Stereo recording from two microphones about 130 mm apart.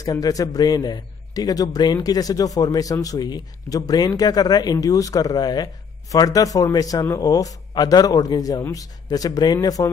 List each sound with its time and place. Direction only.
0.0 s a man's voice: 25° left (ahead or behind)